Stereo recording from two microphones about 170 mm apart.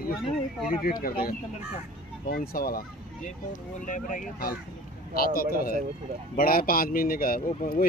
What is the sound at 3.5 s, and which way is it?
Speech, 50° left (ahead or behind).